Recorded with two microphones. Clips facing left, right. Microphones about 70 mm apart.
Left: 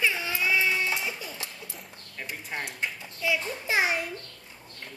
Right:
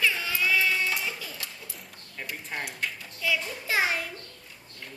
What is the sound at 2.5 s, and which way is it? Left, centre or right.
A woman's voice, centre.